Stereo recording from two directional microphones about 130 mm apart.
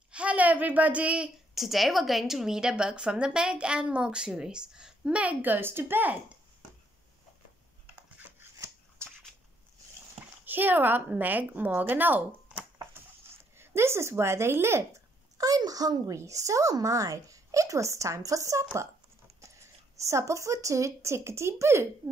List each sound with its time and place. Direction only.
0.1 s a woman's voice: 10° right (ahead or behind)
8.4 s shuffling cards: 20° right (ahead or behind)
10.4 s a woman's voice: 15° right (ahead or behind)
20.0 s speech: 25° right (ahead or behind)